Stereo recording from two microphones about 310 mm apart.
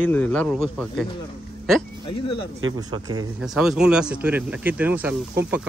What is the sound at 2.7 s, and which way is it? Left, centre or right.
Speech, centre.